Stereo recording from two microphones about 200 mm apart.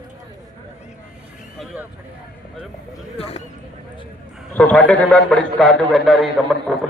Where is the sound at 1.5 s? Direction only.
10° right (ahead or behind).